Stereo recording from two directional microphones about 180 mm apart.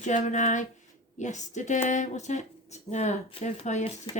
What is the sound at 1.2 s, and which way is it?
Speech, 40° left (ahead or behind).